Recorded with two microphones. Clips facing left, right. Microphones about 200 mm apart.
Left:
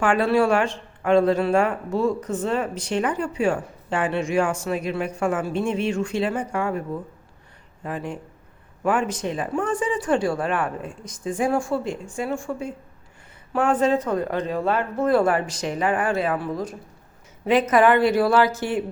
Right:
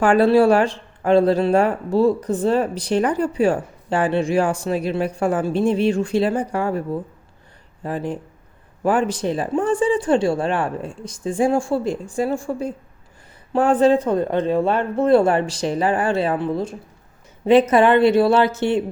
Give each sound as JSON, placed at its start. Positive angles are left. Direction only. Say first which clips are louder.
{"t": 0.0, "sound": "a man's voice", "louder": "right 5 dB", "side_deg": -35}